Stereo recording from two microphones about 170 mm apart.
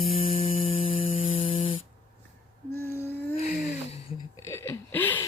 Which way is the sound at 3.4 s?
45° left (ahead or behind).